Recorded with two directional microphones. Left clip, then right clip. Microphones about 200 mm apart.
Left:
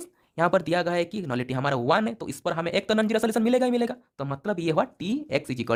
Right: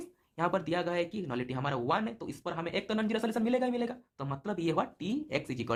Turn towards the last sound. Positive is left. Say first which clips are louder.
# left 7 dB
turn(degrees=35)  # may be behind; listen again after turning